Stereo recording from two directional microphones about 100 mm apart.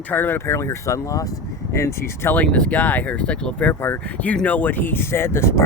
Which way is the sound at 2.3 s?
15° left (ahead or behind).